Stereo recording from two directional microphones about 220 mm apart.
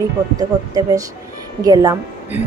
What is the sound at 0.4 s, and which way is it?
Speech, 15° right (ahead or behind).